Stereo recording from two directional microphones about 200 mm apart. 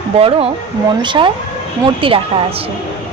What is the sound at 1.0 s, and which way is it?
A woman's voice, 25° right (ahead or behind).